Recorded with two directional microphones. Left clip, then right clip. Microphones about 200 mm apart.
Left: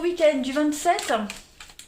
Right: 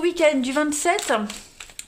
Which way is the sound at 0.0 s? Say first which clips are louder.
Right 1 dB; 45° right (ahead or behind).